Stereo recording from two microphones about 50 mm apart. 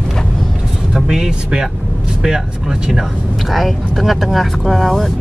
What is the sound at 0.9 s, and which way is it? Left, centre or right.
Speech, centre.